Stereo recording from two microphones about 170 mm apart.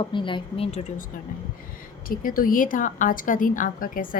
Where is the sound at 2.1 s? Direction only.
55° left (ahead or behind).